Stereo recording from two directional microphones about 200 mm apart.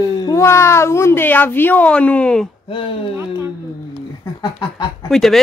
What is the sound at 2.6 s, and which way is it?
Speech, 25° left (ahead or behind).